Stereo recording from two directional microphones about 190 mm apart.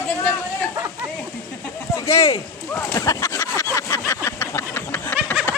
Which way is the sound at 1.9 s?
15° left (ahead or behind).